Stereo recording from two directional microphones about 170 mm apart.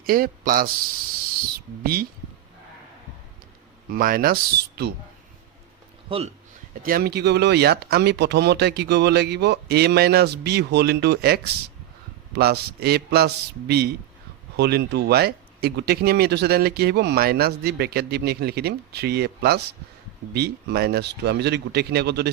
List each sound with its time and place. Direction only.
0.0 s speech: 55° right (ahead or behind)
1.8 s speech: 60° right (ahead or behind)
3.9 s speech: 60° right (ahead or behind)
6.1 s speech: 35° right (ahead or behind)
6.8 s speech: 65° right (ahead or behind)